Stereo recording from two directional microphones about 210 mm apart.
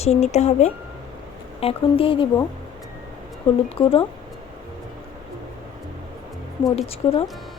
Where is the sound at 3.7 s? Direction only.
25° left (ahead or behind).